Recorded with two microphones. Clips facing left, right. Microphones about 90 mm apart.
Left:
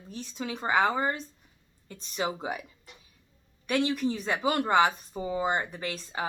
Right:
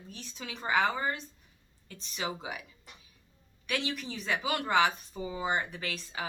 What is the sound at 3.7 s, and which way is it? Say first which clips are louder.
Speech: left 8 dB; 40° left (ahead or behind).